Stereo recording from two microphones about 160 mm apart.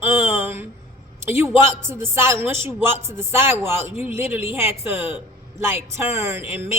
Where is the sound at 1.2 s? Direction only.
15° right (ahead or behind).